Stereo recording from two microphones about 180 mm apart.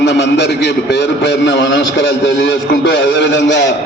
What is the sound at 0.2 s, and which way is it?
A man's voice, 70° left (ahead or behind).